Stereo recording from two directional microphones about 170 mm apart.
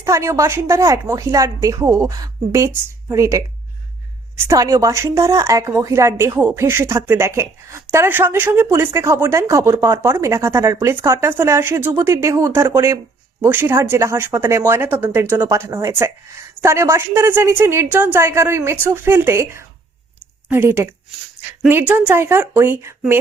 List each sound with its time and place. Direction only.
0.0 s speech: 15° right (ahead or behind)
4.4 s speech: 20° right (ahead or behind)